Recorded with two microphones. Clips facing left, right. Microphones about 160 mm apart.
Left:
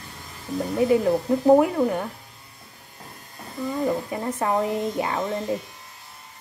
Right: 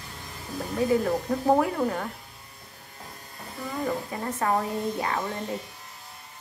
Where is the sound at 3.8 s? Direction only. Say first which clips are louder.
Left 4 dB; 20° left (ahead or behind).